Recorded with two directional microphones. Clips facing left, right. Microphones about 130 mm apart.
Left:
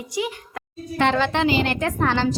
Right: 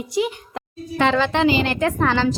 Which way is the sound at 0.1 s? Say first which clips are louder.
Right 4 dB; 20° right (ahead or behind).